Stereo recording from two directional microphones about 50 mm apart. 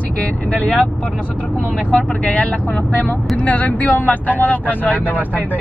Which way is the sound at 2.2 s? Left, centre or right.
Left.